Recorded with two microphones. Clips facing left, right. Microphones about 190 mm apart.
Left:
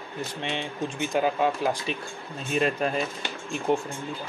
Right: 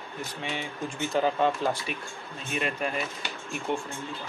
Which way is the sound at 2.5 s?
35° left (ahead or behind).